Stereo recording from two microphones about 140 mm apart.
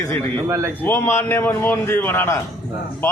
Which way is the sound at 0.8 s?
15° left (ahead or behind).